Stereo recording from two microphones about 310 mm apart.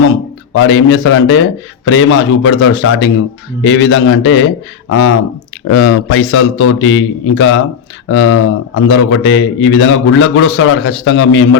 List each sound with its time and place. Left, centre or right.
0.5 s a man's voice: left